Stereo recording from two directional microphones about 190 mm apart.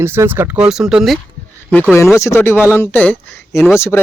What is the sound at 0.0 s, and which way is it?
Speech, 15° right (ahead or behind).